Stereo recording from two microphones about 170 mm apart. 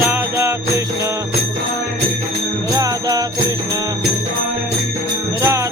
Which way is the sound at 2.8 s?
25° right (ahead or behind).